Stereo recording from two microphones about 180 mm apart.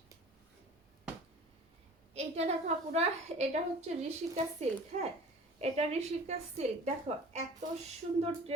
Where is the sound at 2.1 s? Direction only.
35° right (ahead or behind).